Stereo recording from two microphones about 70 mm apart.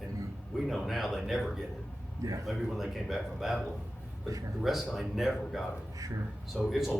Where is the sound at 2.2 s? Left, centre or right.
Right.